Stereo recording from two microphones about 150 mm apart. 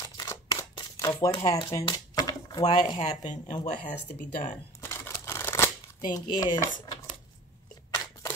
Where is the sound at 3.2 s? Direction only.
55° left (ahead or behind).